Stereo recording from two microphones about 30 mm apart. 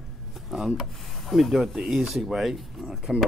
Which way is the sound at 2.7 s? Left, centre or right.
Centre.